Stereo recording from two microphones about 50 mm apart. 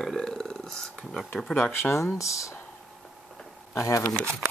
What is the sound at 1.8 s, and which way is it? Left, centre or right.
Speech, left.